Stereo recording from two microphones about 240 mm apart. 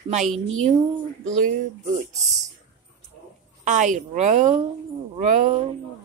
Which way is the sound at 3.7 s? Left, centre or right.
Right.